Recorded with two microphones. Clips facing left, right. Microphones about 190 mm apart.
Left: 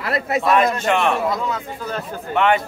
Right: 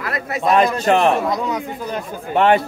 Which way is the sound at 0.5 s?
35° right (ahead or behind).